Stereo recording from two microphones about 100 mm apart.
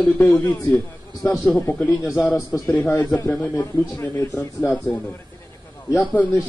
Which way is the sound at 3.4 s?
30° left (ahead or behind).